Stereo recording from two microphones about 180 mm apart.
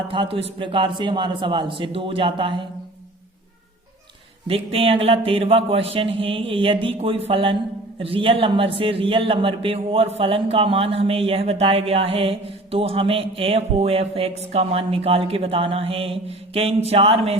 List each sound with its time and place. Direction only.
0.1 s a man's voice: 30° right (ahead or behind)
4.4 s a man's voice: 30° right (ahead or behind)